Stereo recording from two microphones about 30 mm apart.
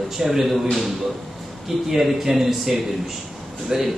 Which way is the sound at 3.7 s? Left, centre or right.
Right.